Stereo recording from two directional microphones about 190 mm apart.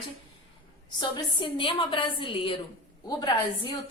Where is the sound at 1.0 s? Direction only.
25° left (ahead or behind).